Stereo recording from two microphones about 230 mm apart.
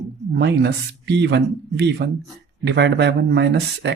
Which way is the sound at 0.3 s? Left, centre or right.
Right.